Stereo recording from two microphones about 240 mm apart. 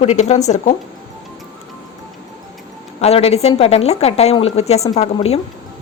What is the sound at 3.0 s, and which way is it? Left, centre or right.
A woman's voice, left.